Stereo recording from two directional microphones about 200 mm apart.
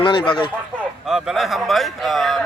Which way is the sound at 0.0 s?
25° left (ahead or behind).